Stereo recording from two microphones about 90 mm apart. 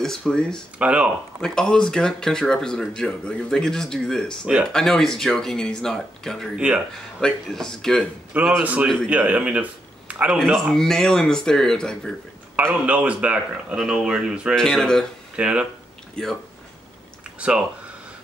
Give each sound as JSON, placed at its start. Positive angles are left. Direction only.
{"t": 0.0, "sound": "speech", "side_deg": 5}
{"t": 0.7, "sound": "speech", "side_deg": -15}
{"t": 1.4, "sound": "speech", "side_deg": 5}
{"t": 6.5, "sound": "speech", "side_deg": -10}
{"t": 7.2, "sound": "speech", "side_deg": 5}
{"t": 8.3, "sound": "speech", "side_deg": -15}
{"t": 8.8, "sound": "speech", "side_deg": 5}
{"t": 9.1, "sound": "speech", "side_deg": -15}
{"t": 10.4, "sound": "speech", "side_deg": 5}
{"t": 12.8, "sound": "speech", "side_deg": -15}
{"t": 13.7, "sound": "speech", "side_deg": -5}
{"t": 14.5, "sound": "speech", "side_deg": 5}
{"t": 15.3, "sound": "speech", "side_deg": -10}
{"t": 16.2, "sound": "speech", "side_deg": 10}